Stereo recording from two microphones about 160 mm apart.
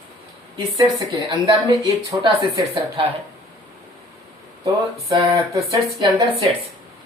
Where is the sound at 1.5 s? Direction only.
25° right (ahead or behind).